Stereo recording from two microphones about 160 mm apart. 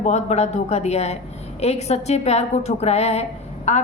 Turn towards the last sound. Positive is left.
turn(degrees=45)  # may be behind; listen again after turning